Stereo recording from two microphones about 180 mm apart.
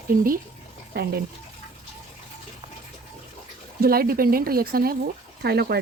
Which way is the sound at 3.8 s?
55° right (ahead or behind).